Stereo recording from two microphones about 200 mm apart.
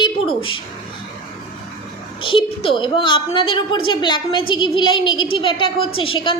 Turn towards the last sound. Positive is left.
turn(degrees=25)  # may be behind; listen again after turning